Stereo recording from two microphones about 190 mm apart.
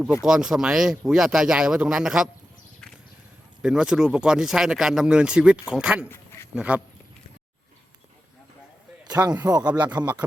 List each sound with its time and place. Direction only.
0.0 s speech: centre (ahead or behind)
3.6 s speech: 5° right (ahead or behind)
6.1 s a sound: 15° left (ahead or behind)
6.5 s speech: 5° right (ahead or behind)
9.0 s a sound: 20° right (ahead or behind)
9.3 s speech: 15° right (ahead or behind)